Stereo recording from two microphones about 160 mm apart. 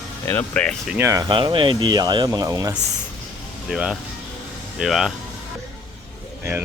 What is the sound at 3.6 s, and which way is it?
Speech, 5° right (ahead or behind).